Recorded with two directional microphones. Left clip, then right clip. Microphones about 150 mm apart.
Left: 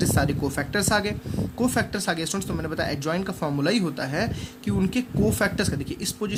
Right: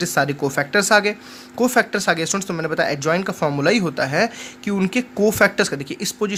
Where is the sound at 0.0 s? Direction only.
30° right (ahead or behind).